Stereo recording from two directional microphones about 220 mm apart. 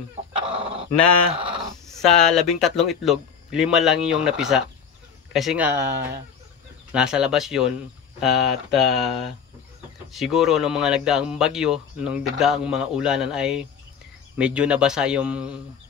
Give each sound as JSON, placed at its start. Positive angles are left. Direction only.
{"t": 0.4, "sound": "chicken", "side_deg": -25}
{"t": 1.3, "sound": "speech", "side_deg": -25}
{"t": 1.9, "sound": "speech", "side_deg": 0}